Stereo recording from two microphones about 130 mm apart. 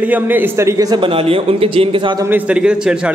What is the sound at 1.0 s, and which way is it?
A man's voice, 45° right (ahead or behind).